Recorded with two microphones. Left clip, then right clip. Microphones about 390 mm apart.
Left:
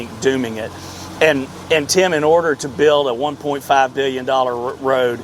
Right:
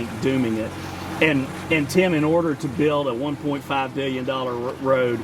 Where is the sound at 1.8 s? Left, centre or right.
Left.